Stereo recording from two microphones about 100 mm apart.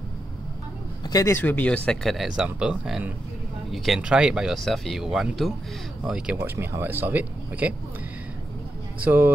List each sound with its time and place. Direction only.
1.0 s a sound: 40° left (ahead or behind)
1.3 s speech: 15° left (ahead or behind)
2.1 s speech: 5° right (ahead or behind)
6.4 s speech: 25° right (ahead or behind)
9.0 s speech: 20° right (ahead or behind)